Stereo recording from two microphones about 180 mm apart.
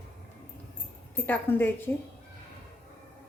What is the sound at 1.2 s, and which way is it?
Speech, 10° left (ahead or behind).